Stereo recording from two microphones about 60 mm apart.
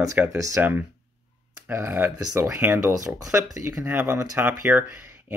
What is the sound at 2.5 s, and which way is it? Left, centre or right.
Speech, right.